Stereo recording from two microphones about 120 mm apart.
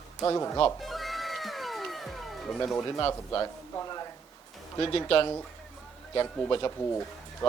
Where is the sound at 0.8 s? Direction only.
Centre (ahead or behind).